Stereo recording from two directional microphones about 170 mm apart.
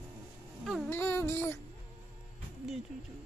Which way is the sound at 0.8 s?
15° left (ahead or behind).